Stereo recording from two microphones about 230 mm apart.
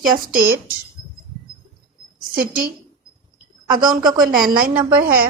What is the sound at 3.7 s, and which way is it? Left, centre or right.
Speech, centre.